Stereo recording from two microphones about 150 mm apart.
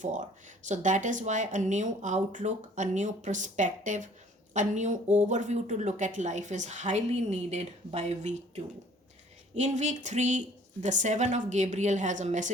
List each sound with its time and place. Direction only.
0.0 s speech: 55° right (ahead or behind)